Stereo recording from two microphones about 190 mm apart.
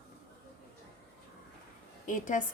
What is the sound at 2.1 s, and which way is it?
Speech, 45° left (ahead or behind).